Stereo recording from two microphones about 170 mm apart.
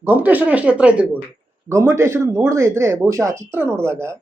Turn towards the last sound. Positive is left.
turn(degrees=-15)  # may be behind; listen again after turning